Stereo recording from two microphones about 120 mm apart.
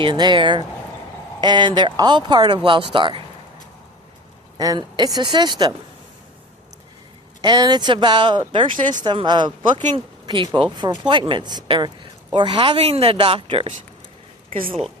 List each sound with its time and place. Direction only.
0.0 s speech: 40° right (ahead or behind)
4.5 s speech: 35° right (ahead or behind)
7.4 s speech: 35° right (ahead or behind)